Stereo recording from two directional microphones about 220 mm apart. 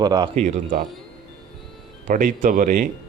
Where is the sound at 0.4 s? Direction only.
35° right (ahead or behind).